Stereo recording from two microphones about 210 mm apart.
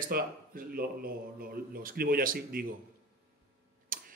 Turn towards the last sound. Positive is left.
turn(degrees=-40)  # may be behind; listen again after turning